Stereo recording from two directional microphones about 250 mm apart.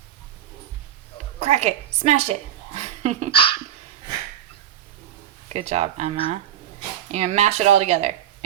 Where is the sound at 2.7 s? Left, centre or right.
Right.